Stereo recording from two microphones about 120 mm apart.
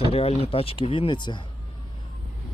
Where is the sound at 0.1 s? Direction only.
55° left (ahead or behind).